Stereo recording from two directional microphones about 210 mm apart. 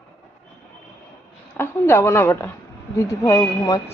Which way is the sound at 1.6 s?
10° left (ahead or behind).